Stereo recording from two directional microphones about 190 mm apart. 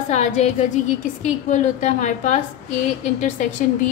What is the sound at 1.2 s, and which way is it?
A woman's voice, 40° left (ahead or behind).